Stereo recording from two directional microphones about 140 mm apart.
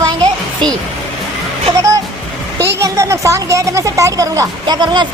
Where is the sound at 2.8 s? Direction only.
20° right (ahead or behind).